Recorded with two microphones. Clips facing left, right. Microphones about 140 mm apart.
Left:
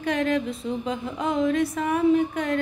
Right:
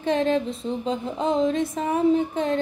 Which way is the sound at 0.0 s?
25° right (ahead or behind).